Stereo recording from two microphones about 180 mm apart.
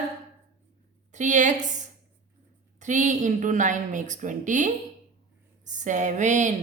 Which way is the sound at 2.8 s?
45° right (ahead or behind).